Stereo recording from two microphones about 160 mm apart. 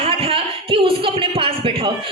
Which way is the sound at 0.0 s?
35° right (ahead or behind).